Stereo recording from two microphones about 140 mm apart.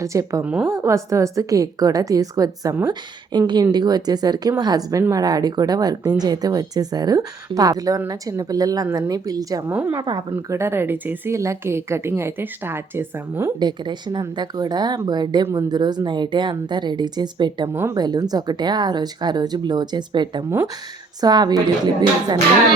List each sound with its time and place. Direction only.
0.0 s a woman's voice: 20° right (ahead or behind)
0.4 s a woman's voice: 10° right (ahead or behind)
0.7 s a woman's voice: 20° right (ahead or behind)
10.0 s a woman's voice: 30° right (ahead or behind)
10.6 s a woman's voice: 15° right (ahead or behind)
13.6 s speech: 30° right (ahead or behind)
17.7 s a woman's voice: 15° right (ahead or behind)
17.9 s a woman's voice: 30° right (ahead or behind)